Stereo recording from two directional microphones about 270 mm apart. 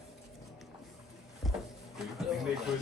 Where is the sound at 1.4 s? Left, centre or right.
Centre.